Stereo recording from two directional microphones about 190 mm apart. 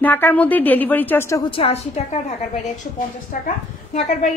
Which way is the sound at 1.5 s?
30° left (ahead or behind).